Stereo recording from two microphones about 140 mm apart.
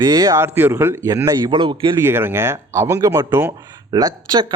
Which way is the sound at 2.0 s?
15° right (ahead or behind).